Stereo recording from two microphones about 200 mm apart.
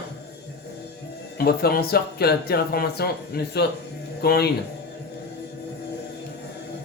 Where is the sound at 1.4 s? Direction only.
50° left (ahead or behind).